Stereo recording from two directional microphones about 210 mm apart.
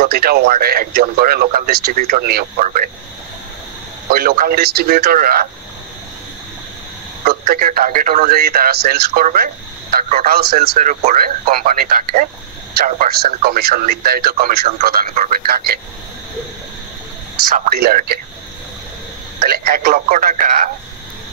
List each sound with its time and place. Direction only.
0.0 s speech: 45° right (ahead or behind)
4.1 s speech: 45° right (ahead or behind)
7.2 s speech: 45° right (ahead or behind)
17.6 s speech: 35° right (ahead or behind)
17.8 s speech: 45° right (ahead or behind)
19.4 s speech: 45° right (ahead or behind)